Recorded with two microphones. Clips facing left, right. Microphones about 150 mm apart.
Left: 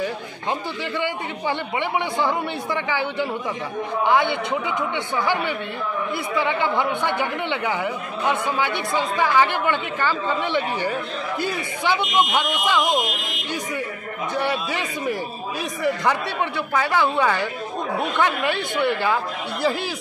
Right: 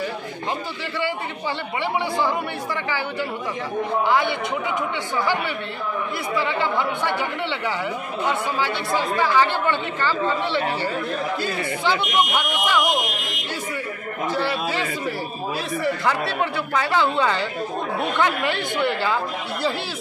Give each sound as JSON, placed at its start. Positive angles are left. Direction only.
{"t": 1.8, "sound": "speech", "side_deg": 20}
{"t": 6.3, "sound": "speech", "side_deg": 20}
{"t": 14.3, "sound": "speech", "side_deg": 20}